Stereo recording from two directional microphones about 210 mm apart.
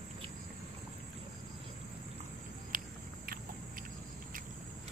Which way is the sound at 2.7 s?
40° right (ahead or behind).